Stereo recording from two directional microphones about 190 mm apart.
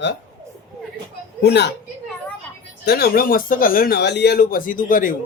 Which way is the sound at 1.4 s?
60° left (ahead or behind).